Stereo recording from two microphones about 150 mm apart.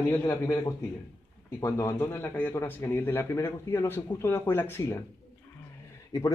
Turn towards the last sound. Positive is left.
turn(degrees=20)  # may be behind; listen again after turning